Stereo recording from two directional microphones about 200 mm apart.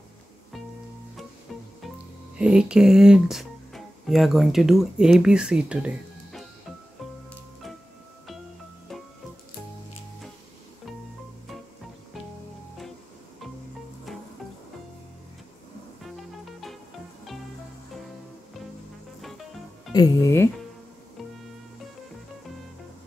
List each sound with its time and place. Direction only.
1.8 s speech: 5° right (ahead or behind)
19.9 s music: 20° left (ahead or behind)